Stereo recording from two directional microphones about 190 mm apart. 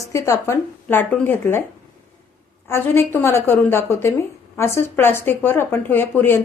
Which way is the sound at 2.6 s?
10° left (ahead or behind).